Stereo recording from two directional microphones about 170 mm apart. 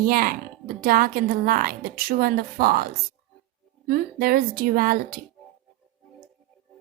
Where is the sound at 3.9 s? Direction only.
60° right (ahead or behind).